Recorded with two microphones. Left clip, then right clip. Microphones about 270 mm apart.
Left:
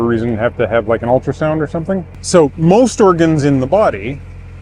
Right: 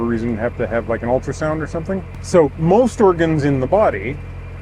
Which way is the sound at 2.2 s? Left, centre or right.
Left.